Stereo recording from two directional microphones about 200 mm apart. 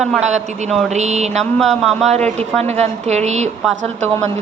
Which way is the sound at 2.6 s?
35° right (ahead or behind).